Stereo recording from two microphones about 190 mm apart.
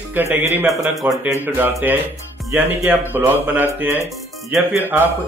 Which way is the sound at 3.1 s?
10° right (ahead or behind).